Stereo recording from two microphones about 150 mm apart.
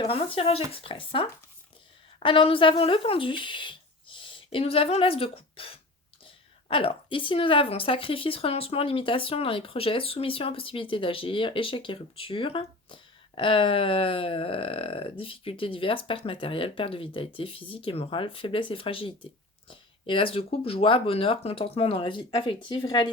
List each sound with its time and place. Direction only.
0.1 s a woman's voice: 40° left (ahead or behind)